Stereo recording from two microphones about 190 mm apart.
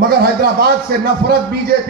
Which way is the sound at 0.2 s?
50° right (ahead or behind).